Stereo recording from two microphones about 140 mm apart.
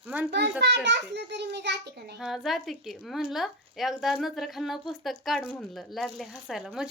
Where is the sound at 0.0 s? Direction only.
10° right (ahead or behind).